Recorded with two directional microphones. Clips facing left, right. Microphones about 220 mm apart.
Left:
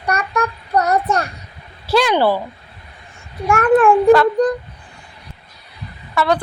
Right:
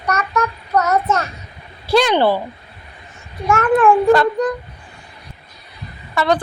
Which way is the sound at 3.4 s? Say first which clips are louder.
Left 1 dB; 30° left (ahead or behind).